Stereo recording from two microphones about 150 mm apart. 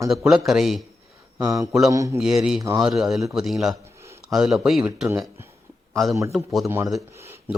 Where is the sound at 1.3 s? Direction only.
25° right (ahead or behind).